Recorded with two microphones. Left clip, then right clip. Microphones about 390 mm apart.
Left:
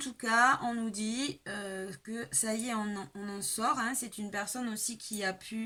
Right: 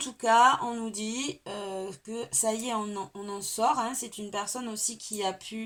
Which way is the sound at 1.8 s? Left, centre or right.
Right.